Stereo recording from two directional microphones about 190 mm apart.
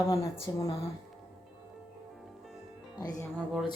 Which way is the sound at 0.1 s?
15° left (ahead or behind).